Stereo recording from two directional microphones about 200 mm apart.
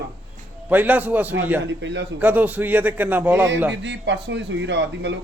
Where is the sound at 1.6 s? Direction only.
65° right (ahead or behind).